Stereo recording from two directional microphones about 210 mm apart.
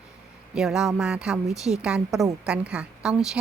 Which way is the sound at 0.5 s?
Centre (ahead or behind).